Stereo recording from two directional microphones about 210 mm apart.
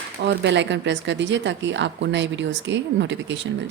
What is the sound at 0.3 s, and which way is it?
A woman's voice, 60° right (ahead or behind).